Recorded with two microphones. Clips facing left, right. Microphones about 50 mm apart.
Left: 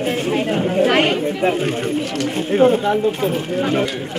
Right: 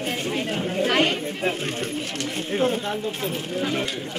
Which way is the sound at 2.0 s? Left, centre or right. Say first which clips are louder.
Left 8 dB; left.